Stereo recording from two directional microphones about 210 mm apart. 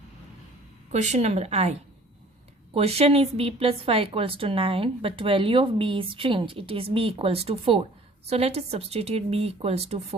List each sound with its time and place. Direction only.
0.9 s a woman's voice: 35° right (ahead or behind)